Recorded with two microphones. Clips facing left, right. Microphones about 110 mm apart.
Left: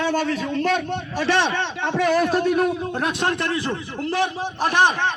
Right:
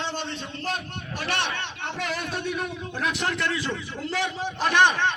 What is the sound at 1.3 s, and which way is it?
A man's voice, 70° left (ahead or behind).